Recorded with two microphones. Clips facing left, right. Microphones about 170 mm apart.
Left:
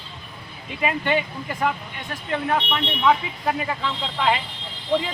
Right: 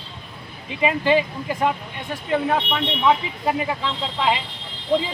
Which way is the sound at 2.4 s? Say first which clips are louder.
Right 2 dB; 20° right (ahead or behind).